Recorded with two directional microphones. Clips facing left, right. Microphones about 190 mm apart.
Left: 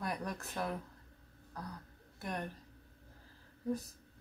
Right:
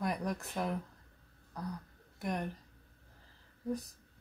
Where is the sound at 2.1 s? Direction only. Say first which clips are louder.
Right 4 dB; 15° right (ahead or behind).